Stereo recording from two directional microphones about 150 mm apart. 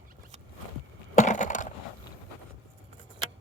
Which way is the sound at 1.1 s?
55° left (ahead or behind).